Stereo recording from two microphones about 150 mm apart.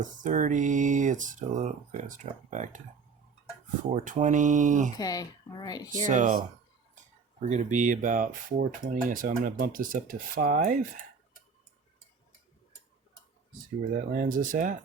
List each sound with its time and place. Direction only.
0.0 s speech: 60° right (ahead or behind)
3.9 s speech: 55° right (ahead or behind)
4.9 s speech: 25° left (ahead or behind)
6.1 s speech: 55° right (ahead or behind)
13.9 s speech: 65° right (ahead or behind)